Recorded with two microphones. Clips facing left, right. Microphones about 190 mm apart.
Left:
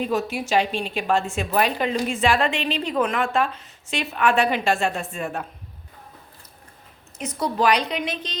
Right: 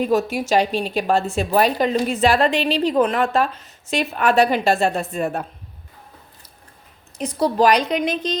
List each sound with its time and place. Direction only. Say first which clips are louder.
0.0 s a woman's voice: right 5 dB; 40° right (ahead or behind)
7.2 s a woman's voice: right 6 dB; 35° right (ahead or behind)